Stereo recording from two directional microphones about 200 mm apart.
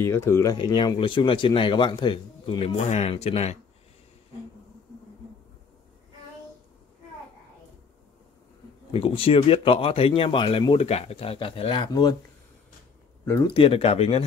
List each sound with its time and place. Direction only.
0.0 s speech: 15° left (ahead or behind); by 3.5 s 30° left (ahead or behind)
8.9 s speech: 30° left (ahead or behind)
13.5 s speech: 30° left (ahead or behind)